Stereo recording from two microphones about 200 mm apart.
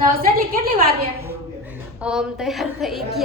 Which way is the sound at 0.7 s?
50° right (ahead or behind).